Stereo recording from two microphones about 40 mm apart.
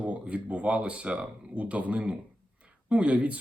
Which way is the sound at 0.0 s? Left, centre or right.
Right.